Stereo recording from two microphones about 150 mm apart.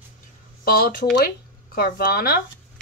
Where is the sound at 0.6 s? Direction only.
90° left.